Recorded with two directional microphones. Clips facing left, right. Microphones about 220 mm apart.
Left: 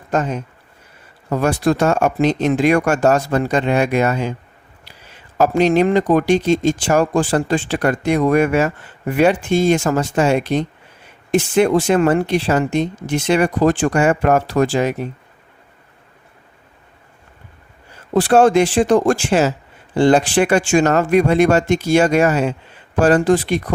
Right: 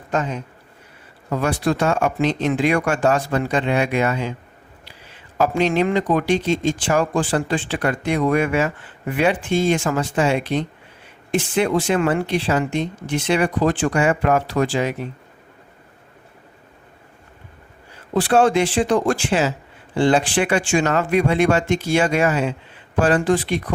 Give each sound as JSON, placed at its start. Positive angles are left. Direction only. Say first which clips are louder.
{"t": 0.1, "sound": "speech", "louder": "left 3 dB", "side_deg": 45}
{"t": 5.4, "sound": "speech", "louder": "left 4 dB", "side_deg": 45}
{"t": 18.1, "sound": "speech", "louder": "left 4 dB", "side_deg": 45}